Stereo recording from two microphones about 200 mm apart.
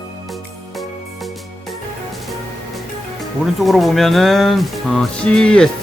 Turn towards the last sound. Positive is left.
turn(degrees=5)  # may be behind; listen again after turning